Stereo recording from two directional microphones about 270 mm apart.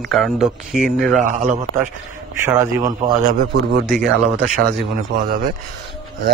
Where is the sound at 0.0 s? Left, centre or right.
Centre.